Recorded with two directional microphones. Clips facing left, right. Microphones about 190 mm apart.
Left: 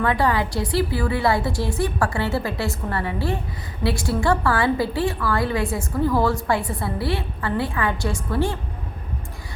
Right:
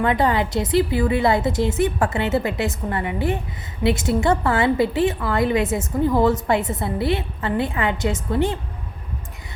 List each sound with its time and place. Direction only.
0.0 s a woman's voice: 20° right (ahead or behind)